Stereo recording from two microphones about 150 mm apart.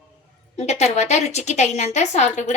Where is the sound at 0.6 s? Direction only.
45° left (ahead or behind).